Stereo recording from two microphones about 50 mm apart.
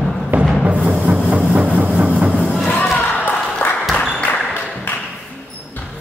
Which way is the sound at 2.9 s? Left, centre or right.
Left.